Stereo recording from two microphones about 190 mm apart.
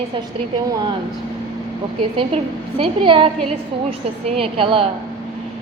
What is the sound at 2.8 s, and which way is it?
Speech, 25° right (ahead or behind).